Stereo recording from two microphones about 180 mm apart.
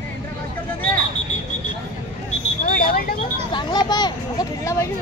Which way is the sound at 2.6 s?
55° left (ahead or behind).